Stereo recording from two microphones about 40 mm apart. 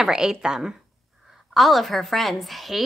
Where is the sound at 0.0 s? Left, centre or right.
Centre.